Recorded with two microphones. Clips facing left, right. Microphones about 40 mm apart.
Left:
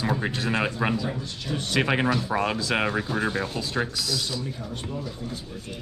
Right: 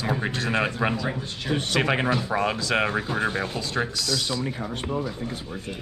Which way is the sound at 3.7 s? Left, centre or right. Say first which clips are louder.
Right 1 dB; centre.